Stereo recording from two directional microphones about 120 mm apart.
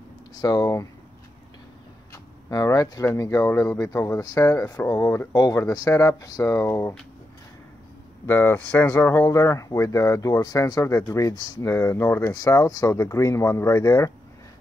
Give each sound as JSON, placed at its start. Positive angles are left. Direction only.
{"t": 0.4, "sound": "speech", "side_deg": 35}
{"t": 2.5, "sound": "speech", "side_deg": 30}
{"t": 8.3, "sound": "speech", "side_deg": 15}